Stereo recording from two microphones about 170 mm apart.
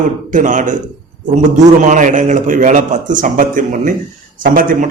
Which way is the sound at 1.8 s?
45° right (ahead or behind).